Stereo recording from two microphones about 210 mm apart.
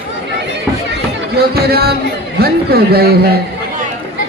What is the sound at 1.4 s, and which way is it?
A man's voice, 50° right (ahead or behind).